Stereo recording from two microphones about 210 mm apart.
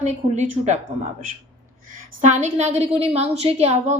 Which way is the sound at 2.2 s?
35° right (ahead or behind).